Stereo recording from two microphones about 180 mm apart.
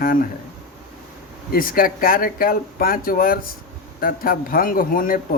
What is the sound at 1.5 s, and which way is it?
A man's voice, 55° left (ahead or behind).